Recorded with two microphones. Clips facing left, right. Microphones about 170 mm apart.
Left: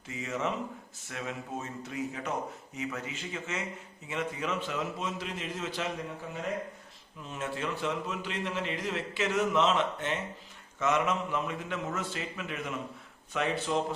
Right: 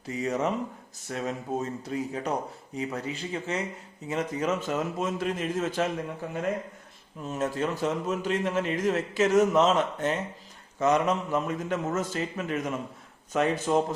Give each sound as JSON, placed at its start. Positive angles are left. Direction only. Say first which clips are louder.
{"t": 0.0, "sound": "a man's voice", "louder": "right 6 dB", "side_deg": -35}
{"t": 7.2, "sound": "a man's voice", "louder": "right 7 dB", "side_deg": -40}